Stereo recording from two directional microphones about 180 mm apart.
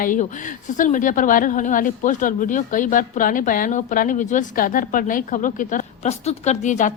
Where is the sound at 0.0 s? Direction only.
50° left (ahead or behind).